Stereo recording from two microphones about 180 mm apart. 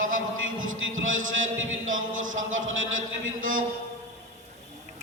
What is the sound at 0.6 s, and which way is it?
A man's voice, 90° right.